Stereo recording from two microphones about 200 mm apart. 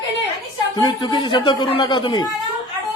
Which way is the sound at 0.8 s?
20° left (ahead or behind).